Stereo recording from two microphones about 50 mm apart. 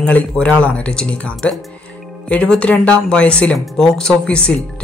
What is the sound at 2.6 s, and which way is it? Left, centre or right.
Speech, left.